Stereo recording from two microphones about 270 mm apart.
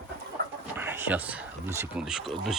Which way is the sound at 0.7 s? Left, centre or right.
Centre.